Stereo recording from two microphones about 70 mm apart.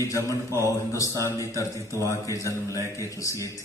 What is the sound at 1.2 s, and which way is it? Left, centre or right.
A man's voice, left.